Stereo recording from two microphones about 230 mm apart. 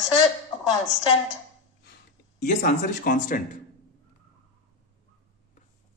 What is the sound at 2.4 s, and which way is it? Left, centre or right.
Speech, left.